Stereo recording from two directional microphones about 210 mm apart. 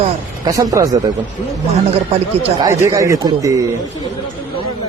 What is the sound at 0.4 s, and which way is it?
Speech, 15° right (ahead or behind).